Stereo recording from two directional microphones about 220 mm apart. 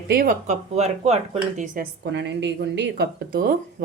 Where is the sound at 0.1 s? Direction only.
40° right (ahead or behind).